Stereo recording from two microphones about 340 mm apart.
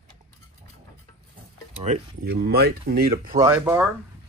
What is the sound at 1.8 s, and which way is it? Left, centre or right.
Speech, right.